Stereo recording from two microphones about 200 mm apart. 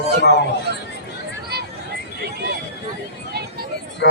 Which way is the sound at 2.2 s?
55° right (ahead or behind).